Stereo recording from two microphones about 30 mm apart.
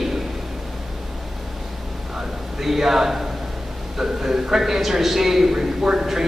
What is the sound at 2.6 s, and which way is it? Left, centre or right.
A man's voice, centre.